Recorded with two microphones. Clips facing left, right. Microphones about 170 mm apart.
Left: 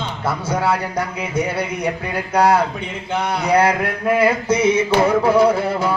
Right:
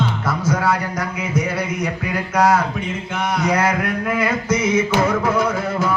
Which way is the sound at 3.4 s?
30° left (ahead or behind).